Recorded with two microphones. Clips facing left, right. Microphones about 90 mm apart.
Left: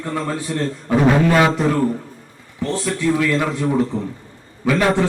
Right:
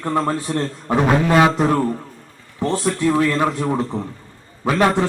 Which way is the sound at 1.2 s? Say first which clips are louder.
Right 1 dB; 25° right (ahead or behind).